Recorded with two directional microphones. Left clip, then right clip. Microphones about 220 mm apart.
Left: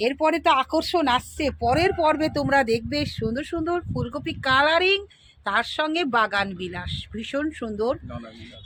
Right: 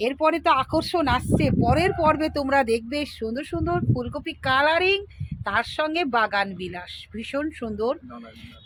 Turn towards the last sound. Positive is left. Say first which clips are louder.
# left 1 dB
turn(degrees=5)  # may be behind; listen again after turning